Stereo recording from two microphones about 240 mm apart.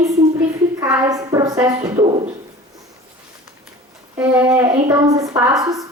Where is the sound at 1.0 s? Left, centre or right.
Centre.